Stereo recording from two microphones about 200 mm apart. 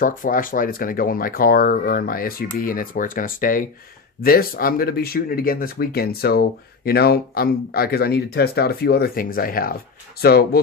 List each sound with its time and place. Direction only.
0.0 s speech: 45° left (ahead or behind)